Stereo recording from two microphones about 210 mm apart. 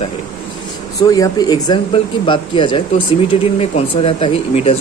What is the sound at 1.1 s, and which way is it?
Speech, 20° left (ahead or behind).